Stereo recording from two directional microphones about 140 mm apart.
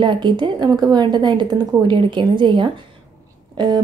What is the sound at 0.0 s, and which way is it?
A woman's voice, 35° right (ahead or behind).